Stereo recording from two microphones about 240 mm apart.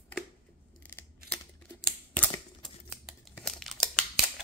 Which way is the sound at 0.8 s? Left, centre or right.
Centre.